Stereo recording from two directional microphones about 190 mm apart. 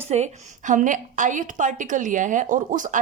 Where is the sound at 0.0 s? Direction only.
35° right (ahead or behind).